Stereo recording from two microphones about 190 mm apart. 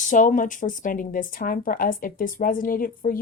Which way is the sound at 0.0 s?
40° left (ahead or behind).